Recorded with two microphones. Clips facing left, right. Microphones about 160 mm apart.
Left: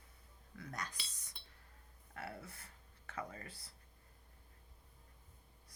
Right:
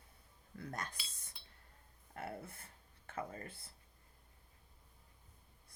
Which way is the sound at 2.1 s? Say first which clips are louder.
Right 3 dB; 25° right (ahead or behind).